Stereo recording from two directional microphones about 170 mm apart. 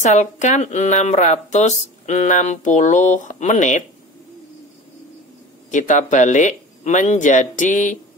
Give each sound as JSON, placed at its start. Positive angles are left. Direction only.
{"t": 0.0, "sound": "speech", "side_deg": 45}
{"t": 5.7, "sound": "speech", "side_deg": 45}